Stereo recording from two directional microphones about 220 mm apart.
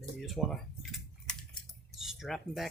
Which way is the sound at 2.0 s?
Centre (ahead or behind).